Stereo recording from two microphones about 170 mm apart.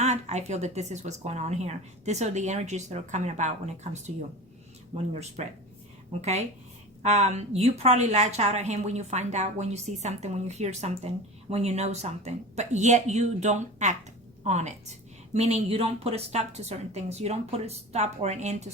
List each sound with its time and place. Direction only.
0.0 s a woman's voice: 40° right (ahead or behind)
5.4 s a woman's voice: 40° right (ahead or behind)
7.0 s a woman's voice: 40° right (ahead or behind)